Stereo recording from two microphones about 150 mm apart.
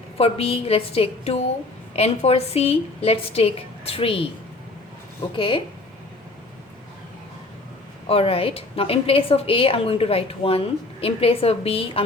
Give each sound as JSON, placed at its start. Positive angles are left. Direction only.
{"t": 0.2, "sound": "a woman's voice", "side_deg": 40}
{"t": 5.3, "sound": "a woman's voice", "side_deg": 35}
{"t": 8.0, "sound": "a woman's voice", "side_deg": 40}